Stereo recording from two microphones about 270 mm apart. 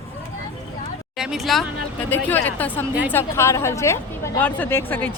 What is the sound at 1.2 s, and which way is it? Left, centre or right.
A woman's voice, centre.